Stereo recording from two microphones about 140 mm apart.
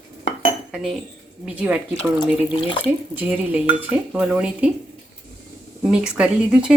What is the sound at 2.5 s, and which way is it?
Speech, 35° left (ahead or behind).